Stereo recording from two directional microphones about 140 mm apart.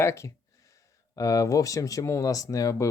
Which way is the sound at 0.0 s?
20° left (ahead or behind).